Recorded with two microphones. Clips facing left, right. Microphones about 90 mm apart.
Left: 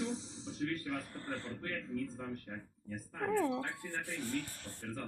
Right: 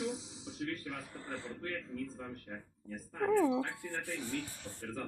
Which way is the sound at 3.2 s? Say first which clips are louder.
Right 4 dB; 10° right (ahead or behind).